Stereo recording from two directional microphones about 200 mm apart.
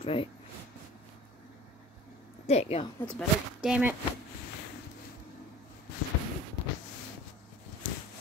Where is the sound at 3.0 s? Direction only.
5° left (ahead or behind).